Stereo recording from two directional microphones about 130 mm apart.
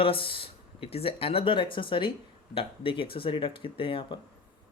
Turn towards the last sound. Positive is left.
turn(degrees=45)  # may be behind; listen again after turning